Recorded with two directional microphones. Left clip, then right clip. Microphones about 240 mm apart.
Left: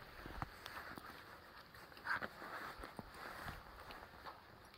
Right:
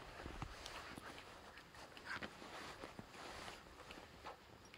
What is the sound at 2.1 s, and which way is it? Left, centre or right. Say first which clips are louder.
Vehicle: left 7 dB; centre.